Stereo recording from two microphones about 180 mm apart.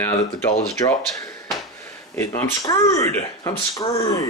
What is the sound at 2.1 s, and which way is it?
Speech, 15° left (ahead or behind).